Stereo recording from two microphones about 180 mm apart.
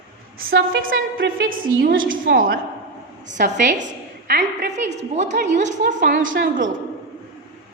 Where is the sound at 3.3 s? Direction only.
45° right (ahead or behind).